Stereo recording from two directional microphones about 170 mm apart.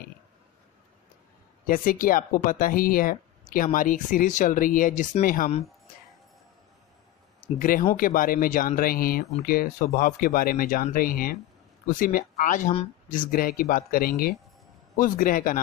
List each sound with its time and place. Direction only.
1.7 s speech: 55° left (ahead or behind)
7.5 s speech: 55° left (ahead or behind)